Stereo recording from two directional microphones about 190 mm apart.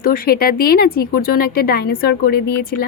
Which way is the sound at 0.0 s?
50° left (ahead or behind).